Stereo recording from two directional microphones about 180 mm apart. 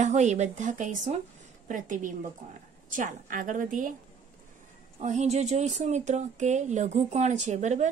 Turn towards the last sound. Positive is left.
turn(degrees=-40)  # may be behind; listen again after turning